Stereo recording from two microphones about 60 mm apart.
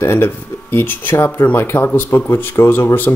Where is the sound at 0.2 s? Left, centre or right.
Left.